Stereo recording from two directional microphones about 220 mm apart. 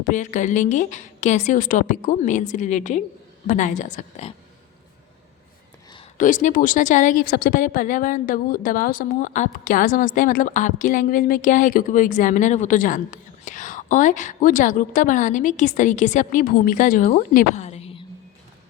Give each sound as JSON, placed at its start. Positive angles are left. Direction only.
{"t": 0.0, "sound": "speech", "side_deg": 35}
{"t": 6.1, "sound": "speech", "side_deg": 35}